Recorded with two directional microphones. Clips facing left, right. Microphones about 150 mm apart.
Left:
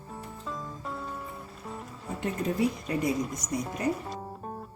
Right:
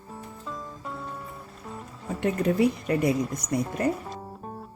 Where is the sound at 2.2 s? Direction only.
65° right (ahead or behind).